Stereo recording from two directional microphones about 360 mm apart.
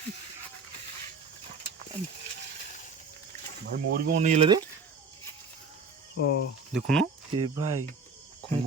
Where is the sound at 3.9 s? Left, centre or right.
Right.